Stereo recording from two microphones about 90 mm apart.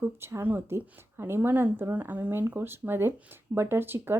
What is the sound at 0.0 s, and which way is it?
A woman's voice, 30° right (ahead or behind).